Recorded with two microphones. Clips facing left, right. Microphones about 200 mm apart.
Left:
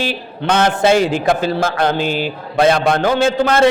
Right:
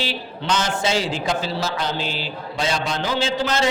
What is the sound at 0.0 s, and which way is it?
A woman's voice, 55° left (ahead or behind).